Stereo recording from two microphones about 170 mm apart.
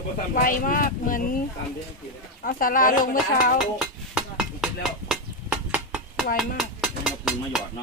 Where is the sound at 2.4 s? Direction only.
55° left (ahead or behind).